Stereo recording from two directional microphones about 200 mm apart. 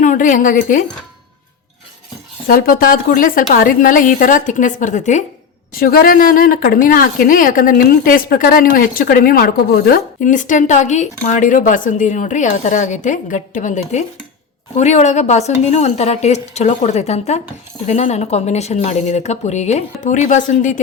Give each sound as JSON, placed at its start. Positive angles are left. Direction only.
{"t": 0.0, "sound": "a woman's voice", "side_deg": 40}
{"t": 2.5, "sound": "a woman's voice", "side_deg": 45}